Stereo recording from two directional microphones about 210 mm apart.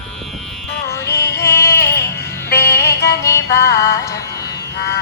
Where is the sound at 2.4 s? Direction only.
50° left (ahead or behind).